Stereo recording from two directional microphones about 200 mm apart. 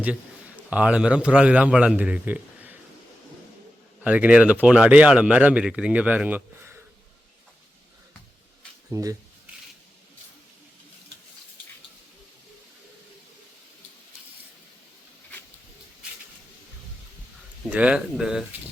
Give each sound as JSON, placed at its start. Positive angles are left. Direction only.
{"t": 0.0, "sound": "a man's voice", "side_deg": -5}
{"t": 4.0, "sound": "speech", "side_deg": -5}
{"t": 8.9, "sound": "speech", "side_deg": -15}
{"t": 17.7, "sound": "speech", "side_deg": -5}